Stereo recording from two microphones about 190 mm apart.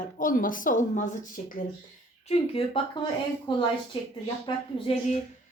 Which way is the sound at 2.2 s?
30° left (ahead or behind).